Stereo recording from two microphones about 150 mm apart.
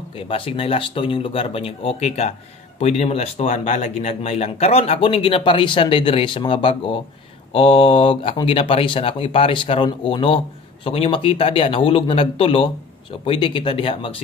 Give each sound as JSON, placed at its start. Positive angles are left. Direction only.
{"t": 0.1, "sound": "speech", "side_deg": 35}